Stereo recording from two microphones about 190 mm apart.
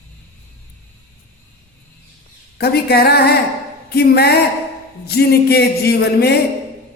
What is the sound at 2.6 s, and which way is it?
Speech, 55° left (ahead or behind).